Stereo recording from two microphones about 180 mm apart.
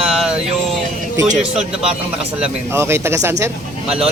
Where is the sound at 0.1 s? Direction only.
5° right (ahead or behind).